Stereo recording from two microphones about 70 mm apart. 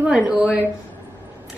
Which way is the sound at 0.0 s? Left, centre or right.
Centre.